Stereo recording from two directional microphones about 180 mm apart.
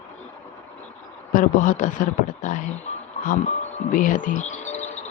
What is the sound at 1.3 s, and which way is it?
Speech, 50° left (ahead or behind).